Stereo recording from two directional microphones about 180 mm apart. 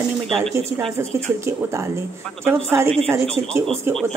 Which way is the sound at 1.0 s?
15° right (ahead or behind).